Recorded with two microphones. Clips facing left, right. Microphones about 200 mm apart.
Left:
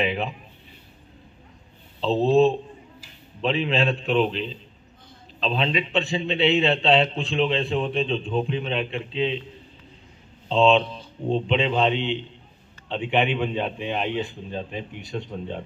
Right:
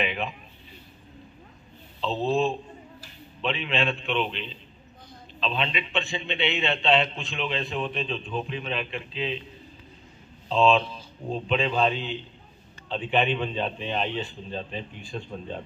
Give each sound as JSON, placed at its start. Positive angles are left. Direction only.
{"t": 0.0, "sound": "a man's voice", "side_deg": 35}
{"t": 3.4, "sound": "a man's voice", "side_deg": 35}
{"t": 10.5, "sound": "a man's voice", "side_deg": 25}
{"t": 15.0, "sound": "speech", "side_deg": 75}
{"t": 15.2, "sound": "a man's voice", "side_deg": 15}